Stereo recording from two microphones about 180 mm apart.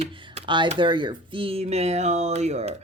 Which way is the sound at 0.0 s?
30° right (ahead or behind).